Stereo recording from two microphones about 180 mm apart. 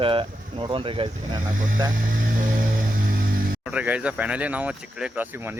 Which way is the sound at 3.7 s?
5° right (ahead or behind).